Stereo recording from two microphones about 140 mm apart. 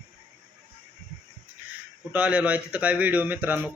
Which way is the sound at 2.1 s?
10° right (ahead or behind).